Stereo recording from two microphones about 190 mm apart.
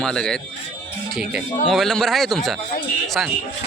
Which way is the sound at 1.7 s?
Centre (ahead or behind).